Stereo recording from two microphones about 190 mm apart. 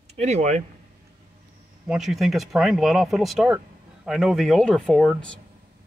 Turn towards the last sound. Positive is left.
turn(degrees=5)  # may be behind; listen again after turning